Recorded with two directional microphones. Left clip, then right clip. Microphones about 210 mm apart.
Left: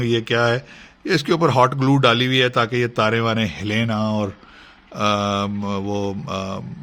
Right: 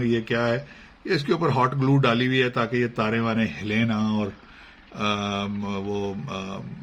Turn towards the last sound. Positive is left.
turn(degrees=45)  # may be behind; listen again after turning